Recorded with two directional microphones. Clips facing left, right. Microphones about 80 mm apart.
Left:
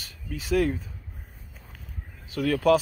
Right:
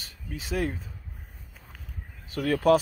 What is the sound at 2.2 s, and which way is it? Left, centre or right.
Speech, right.